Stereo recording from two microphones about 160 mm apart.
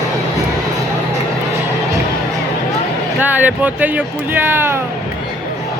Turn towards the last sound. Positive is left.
turn(degrees=-15)  # may be behind; listen again after turning